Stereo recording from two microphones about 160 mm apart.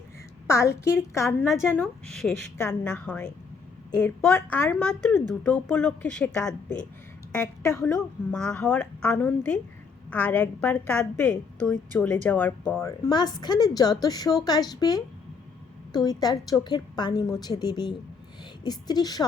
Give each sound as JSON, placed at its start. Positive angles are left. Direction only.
{"t": 0.4, "sound": "a woman's voice", "side_deg": 15}
{"t": 8.4, "sound": "a woman's voice", "side_deg": 5}
{"t": 13.1, "sound": "a woman's voice", "side_deg": 25}